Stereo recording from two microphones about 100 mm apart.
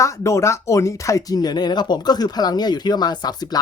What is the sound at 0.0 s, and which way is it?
Speech, 30° left (ahead or behind).